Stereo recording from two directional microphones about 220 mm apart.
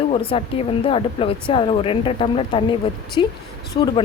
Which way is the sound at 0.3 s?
25° left (ahead or behind).